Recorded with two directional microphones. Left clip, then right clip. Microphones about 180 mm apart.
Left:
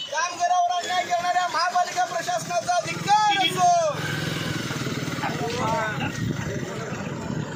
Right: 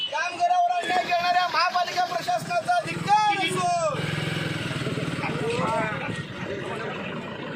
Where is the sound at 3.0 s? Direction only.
20° left (ahead or behind).